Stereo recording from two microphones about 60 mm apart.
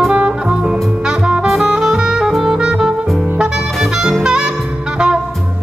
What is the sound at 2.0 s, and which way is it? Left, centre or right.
Saxophone, centre.